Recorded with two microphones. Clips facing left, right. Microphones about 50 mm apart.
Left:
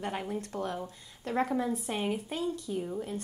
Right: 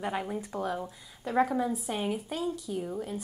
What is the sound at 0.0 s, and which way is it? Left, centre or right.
A woman's voice, centre.